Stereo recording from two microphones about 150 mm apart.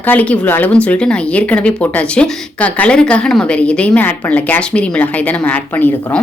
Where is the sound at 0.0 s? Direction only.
10° left (ahead or behind).